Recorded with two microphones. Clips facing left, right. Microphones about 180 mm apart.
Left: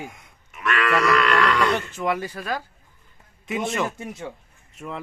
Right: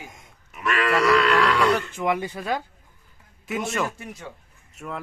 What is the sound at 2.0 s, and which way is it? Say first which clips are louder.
Speech: right 1 dB; 15° right (ahead or behind).